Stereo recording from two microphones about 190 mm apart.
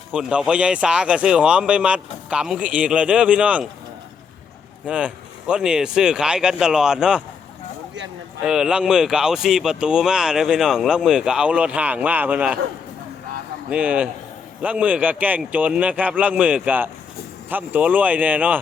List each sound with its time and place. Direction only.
0.1 s speech: 5° right (ahead or behind)
4.9 s speech: 5° right (ahead or behind)
8.4 s speech: 5° right (ahead or behind)
13.7 s a man's voice: 5° right (ahead or behind)